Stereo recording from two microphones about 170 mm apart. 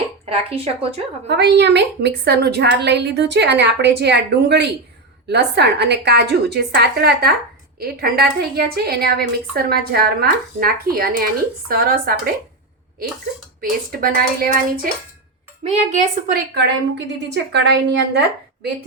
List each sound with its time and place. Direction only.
0.3 s a woman's voice: 35° right (ahead or behind)
1.3 s a woman's voice: 85° right; by 12.3 s 60° right (ahead or behind)
13.6 s a woman's voice: 55° right (ahead or behind)
15.6 s a woman's voice: 40° right (ahead or behind)
17.3 s a woman's voice: 90° right